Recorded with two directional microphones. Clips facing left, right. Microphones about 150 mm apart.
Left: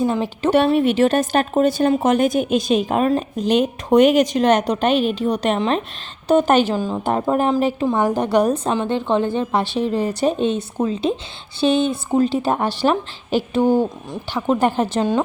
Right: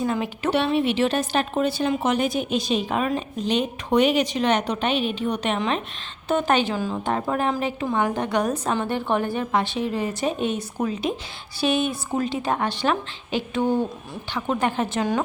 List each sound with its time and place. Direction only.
0.0 s a woman's voice: 30° left (ahead or behind)
0.5 s a woman's voice: 45° left (ahead or behind)
6.7 s a woman's voice: 25° left (ahead or behind)